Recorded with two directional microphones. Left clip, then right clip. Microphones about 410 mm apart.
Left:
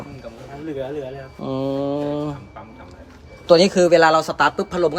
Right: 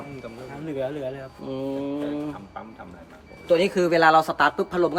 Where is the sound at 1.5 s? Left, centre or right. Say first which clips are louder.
Left 7 dB; centre.